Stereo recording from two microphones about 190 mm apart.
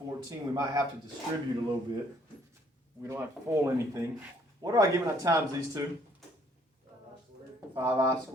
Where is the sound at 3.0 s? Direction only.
15° right (ahead or behind).